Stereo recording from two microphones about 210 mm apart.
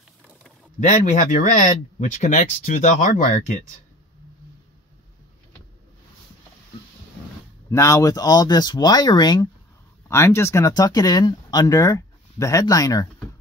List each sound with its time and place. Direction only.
0.7 s speech: 35° left (ahead or behind)
7.7 s speech: 15° left (ahead or behind)